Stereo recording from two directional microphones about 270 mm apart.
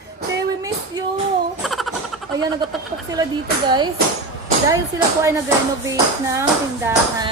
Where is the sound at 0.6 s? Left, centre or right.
Centre.